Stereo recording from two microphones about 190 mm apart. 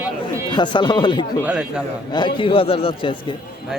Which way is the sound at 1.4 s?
5° right (ahead or behind).